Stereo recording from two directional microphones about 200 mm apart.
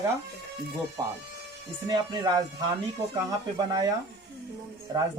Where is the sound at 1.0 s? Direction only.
20° right (ahead or behind).